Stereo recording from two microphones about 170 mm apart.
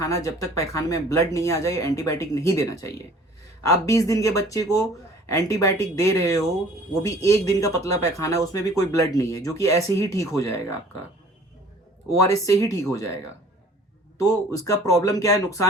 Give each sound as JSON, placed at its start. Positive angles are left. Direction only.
{"t": 0.0, "sound": "speech", "side_deg": 20}
{"t": 12.0, "sound": "speech", "side_deg": 20}
{"t": 14.2, "sound": "speech", "side_deg": 20}